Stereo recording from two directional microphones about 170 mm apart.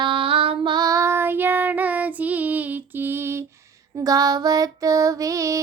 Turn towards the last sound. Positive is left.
turn(degrees=-20)  # may be behind; listen again after turning